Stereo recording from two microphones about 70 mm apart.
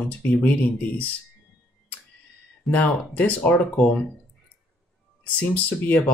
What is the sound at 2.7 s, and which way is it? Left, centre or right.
Speech, left.